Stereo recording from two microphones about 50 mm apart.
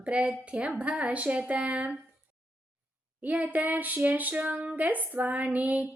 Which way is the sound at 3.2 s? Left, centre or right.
Right.